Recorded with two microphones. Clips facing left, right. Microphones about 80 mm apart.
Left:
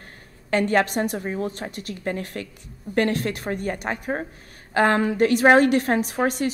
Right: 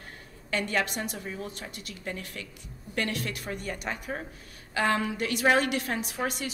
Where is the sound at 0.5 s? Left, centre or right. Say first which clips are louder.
Left 9 dB; left.